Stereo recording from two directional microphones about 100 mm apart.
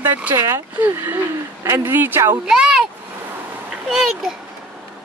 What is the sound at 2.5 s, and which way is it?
Speech, 5° right (ahead or behind).